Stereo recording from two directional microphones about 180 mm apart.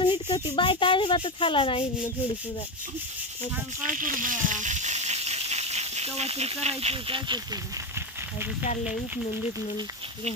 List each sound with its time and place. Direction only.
0.0 s speech: 25° left (ahead or behind)
3.8 s speech: 50° right (ahead or behind); by 7.4 s 25° right (ahead or behind)